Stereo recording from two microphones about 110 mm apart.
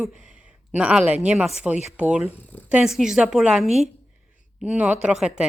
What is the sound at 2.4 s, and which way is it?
Speech, 20° left (ahead or behind).